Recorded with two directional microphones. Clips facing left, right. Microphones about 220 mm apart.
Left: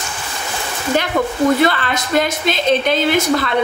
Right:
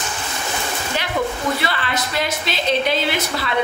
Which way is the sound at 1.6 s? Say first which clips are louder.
Left 7 dB; 50° left (ahead or behind).